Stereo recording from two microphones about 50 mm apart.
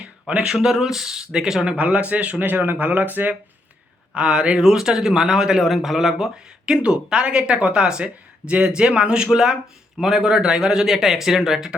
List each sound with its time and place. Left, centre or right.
0.0 s a sound: right
0.4 s a man's voice: centre
1.6 s speech: right
2.5 s speech: right
4.1 s a man's voice: centre
5.6 s speech: centre
6.7 s a man's voice: centre